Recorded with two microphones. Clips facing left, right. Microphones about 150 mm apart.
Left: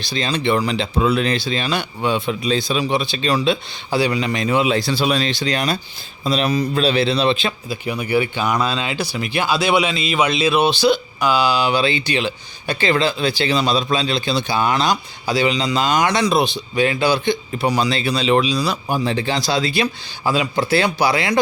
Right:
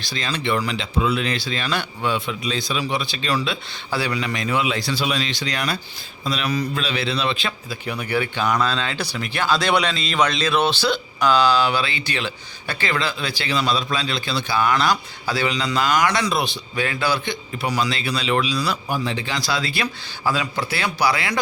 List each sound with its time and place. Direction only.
0.1 s a man's voice: 20° left (ahead or behind); by 1.4 s 40° left (ahead or behind)
1.4 s a man's voice: 25° left (ahead or behind)
7.9 s a man's voice: 5° left (ahead or behind); by 21.4 s 25° left (ahead or behind)